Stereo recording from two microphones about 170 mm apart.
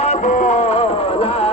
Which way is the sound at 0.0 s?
45° left (ahead or behind).